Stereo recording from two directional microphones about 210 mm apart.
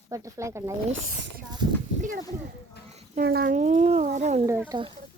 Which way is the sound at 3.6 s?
30° right (ahead or behind).